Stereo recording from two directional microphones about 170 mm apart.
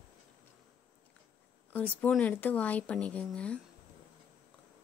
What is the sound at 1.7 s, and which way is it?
Speech, 10° left (ahead or behind).